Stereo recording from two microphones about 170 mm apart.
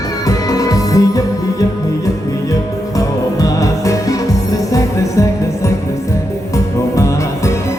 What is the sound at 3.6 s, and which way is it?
Music, 20° left (ahead or behind).